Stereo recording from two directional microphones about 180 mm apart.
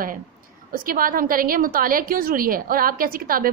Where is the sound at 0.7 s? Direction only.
50° right (ahead or behind).